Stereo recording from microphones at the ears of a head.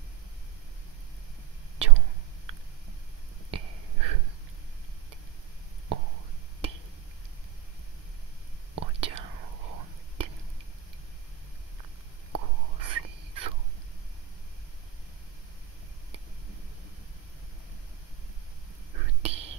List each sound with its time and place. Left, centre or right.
1.8 s whispering: right
3.4 s a sound: right
5.9 s a sound: right
8.7 s whispering: right
12.3 s whispering: right
18.9 s whispering: right